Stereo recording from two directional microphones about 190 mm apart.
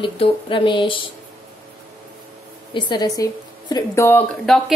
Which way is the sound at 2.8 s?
20° left (ahead or behind).